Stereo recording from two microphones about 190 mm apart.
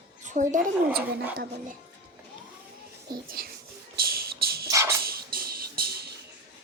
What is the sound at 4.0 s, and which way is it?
Music, 50° right (ahead or behind).